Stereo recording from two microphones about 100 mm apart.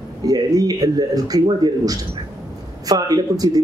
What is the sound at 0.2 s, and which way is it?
A man's voice, 40° right (ahead or behind).